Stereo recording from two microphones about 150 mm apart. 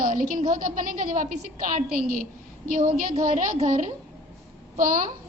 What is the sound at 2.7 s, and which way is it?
A woman's voice, 65° right (ahead or behind).